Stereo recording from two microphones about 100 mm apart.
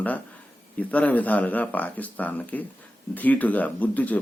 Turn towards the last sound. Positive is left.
turn(degrees=15)  # may be behind; listen again after turning